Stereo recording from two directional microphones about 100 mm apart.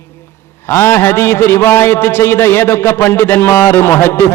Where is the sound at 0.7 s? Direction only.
25° left (ahead or behind).